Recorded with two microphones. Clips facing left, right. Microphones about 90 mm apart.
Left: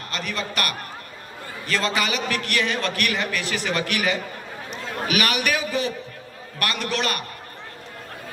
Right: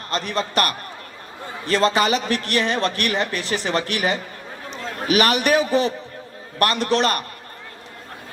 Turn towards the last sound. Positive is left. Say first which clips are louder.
# right 6 dB
turn(degrees=-35)  # may be behind; listen again after turning